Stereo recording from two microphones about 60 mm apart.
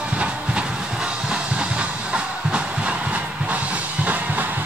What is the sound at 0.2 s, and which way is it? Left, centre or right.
Train, centre.